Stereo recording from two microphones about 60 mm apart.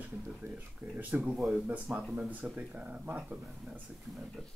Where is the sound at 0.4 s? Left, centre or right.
Right.